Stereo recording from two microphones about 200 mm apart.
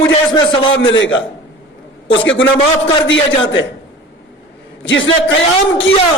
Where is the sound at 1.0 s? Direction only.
75° left (ahead or behind).